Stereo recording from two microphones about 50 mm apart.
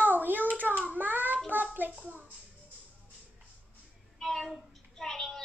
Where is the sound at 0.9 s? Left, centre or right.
Right.